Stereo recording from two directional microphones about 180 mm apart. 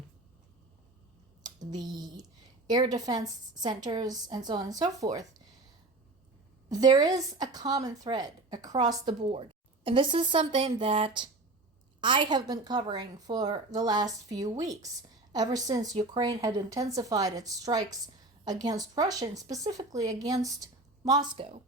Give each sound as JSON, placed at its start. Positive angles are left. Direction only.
{"t": 1.7, "sound": "speech", "side_deg": -20}
{"t": 6.7, "sound": "a woman's voice", "side_deg": -20}
{"t": 21.3, "sound": "speech", "side_deg": -35}